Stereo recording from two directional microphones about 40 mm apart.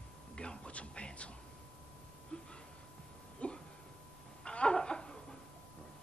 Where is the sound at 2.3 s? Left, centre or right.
Left.